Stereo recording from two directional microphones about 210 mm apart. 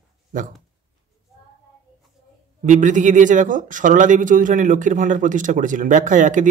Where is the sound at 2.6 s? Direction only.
35° right (ahead or behind).